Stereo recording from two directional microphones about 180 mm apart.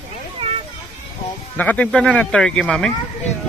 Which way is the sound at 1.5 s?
10° left (ahead or behind).